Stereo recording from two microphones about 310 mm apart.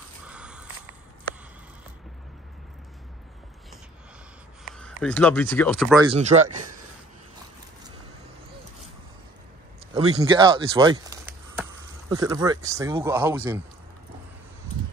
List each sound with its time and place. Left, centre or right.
0.3 s a sound: centre
4.7 s speech: centre
5.9 s speech: right
10.2 s speech: centre